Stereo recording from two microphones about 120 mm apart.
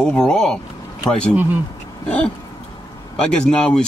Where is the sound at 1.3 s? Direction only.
15° right (ahead or behind).